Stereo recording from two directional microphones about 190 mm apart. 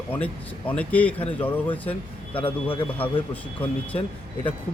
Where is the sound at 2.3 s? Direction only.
30° left (ahead or behind).